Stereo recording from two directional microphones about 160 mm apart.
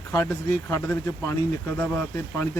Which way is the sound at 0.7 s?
20° left (ahead or behind).